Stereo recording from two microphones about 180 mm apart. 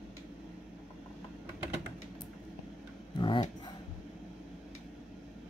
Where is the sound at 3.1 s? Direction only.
25° left (ahead or behind).